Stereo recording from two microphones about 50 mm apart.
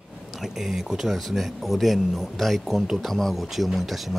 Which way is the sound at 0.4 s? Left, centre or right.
Centre.